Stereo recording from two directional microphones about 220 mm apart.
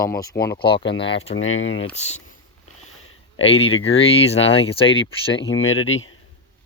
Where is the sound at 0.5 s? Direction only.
50° left (ahead or behind).